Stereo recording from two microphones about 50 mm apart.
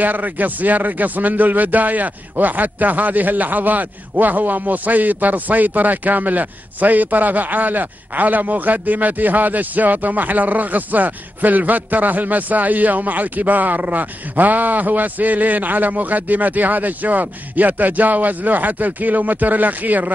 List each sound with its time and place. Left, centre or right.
0.0 s a man's voice: right